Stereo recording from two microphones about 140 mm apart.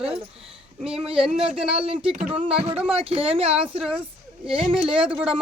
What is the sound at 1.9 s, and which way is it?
Speech, 40° right (ahead or behind).